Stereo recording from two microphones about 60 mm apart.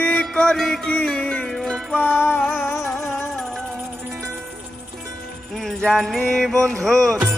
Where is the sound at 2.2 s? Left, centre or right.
Left.